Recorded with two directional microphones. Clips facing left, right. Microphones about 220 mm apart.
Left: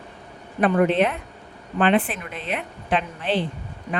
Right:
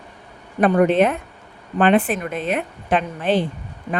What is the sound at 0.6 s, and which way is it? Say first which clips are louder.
Speech: right 3 dB; 45° right (ahead or behind).